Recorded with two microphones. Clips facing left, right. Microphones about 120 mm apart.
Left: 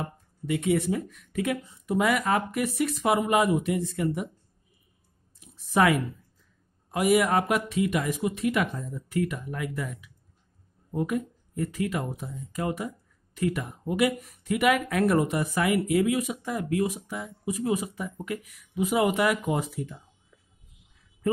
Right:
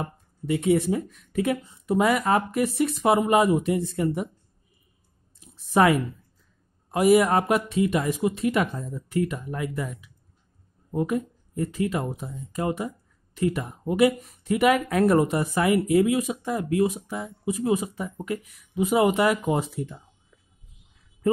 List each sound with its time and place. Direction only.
0.0 s speech: 30° right (ahead or behind)
5.4 s a sound: 30° right (ahead or behind)
6.9 s speech: 30° right (ahead or behind)